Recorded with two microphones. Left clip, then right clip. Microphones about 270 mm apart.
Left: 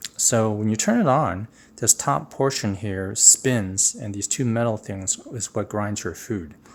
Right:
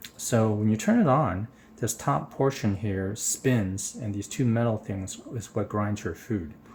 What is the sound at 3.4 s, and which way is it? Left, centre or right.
Speech, left.